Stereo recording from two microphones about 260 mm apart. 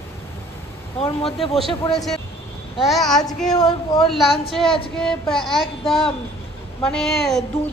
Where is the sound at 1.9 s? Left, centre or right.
Centre.